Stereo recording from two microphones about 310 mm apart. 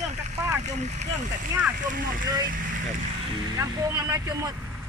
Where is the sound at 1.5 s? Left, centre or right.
Centre.